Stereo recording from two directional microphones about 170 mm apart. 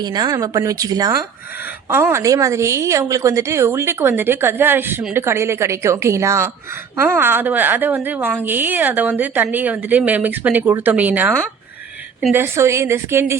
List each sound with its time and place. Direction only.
0.0 s a woman's voice: 25° right (ahead or behind)